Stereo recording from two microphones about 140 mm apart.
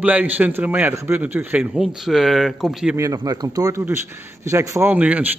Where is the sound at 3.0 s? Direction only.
25° right (ahead or behind).